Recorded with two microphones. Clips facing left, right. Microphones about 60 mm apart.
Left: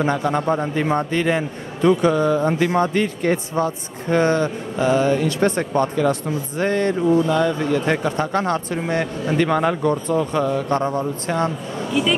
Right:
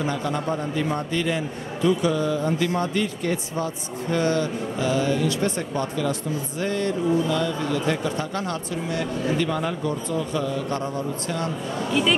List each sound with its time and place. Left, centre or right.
0.0 s a man's voice: left
11.9 s speech: centre